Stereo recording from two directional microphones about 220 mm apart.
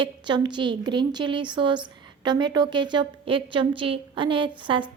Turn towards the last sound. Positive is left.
turn(degrees=-20)  # may be behind; listen again after turning